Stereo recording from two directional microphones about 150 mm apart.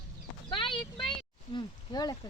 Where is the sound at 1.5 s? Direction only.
30° left (ahead or behind).